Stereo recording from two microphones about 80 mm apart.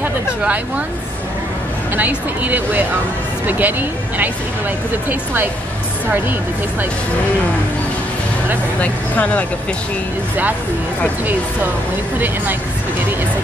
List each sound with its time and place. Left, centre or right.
0.0 s speech: centre
2.0 s speech: right
8.8 s speech: centre